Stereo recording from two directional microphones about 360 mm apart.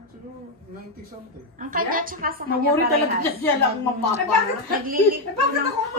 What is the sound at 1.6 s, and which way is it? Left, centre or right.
A woman's voice, right.